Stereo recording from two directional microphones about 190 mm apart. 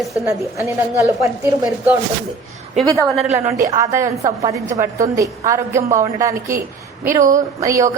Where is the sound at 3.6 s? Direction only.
15° right (ahead or behind).